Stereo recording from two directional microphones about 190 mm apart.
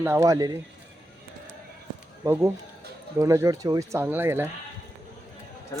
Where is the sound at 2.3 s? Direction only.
15° right (ahead or behind).